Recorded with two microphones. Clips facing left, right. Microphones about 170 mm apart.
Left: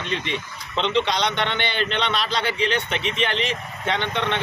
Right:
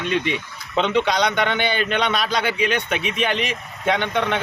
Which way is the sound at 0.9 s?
10° right (ahead or behind).